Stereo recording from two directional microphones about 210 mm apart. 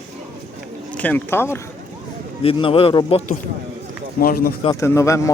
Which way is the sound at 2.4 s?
25° left (ahead or behind).